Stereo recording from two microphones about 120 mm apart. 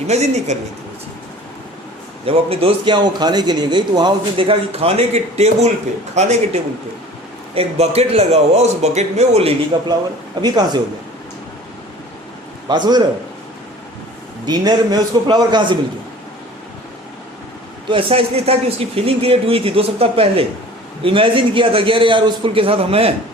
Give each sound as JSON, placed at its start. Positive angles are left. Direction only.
{"t": 0.1, "sound": "speech", "side_deg": -65}
{"t": 2.2, "sound": "a man's voice", "side_deg": -55}
{"t": 10.4, "sound": "a man's voice", "side_deg": -35}
{"t": 12.6, "sound": "a man's voice", "side_deg": -35}
{"t": 14.4, "sound": "a man's voice", "side_deg": -35}
{"t": 17.8, "sound": "speech", "side_deg": -50}